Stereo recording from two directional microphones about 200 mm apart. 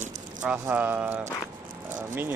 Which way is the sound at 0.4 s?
5° right (ahead or behind).